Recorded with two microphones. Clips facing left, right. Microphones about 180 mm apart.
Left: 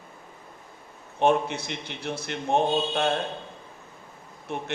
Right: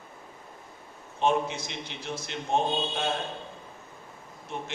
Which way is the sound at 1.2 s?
60° left (ahead or behind).